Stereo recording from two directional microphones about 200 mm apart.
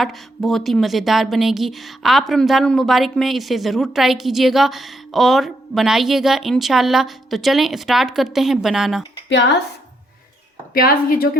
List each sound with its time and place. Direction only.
0.0 s a woman's voice: centre (ahead or behind)
9.3 s a woman's voice: 60° left (ahead or behind)
10.8 s a woman's voice: 45° left (ahead or behind)